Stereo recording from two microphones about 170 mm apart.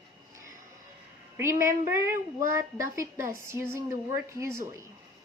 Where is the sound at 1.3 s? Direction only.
15° right (ahead or behind).